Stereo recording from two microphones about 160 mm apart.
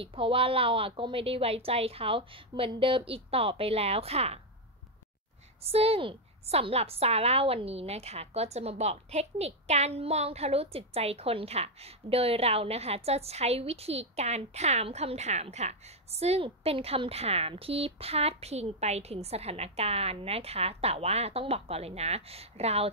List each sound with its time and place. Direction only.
0.0 s a woman's voice: 35° right (ahead or behind)
5.7 s a woman's voice: 40° right (ahead or behind)